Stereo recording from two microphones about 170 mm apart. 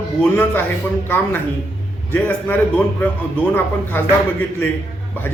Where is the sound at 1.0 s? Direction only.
10° left (ahead or behind).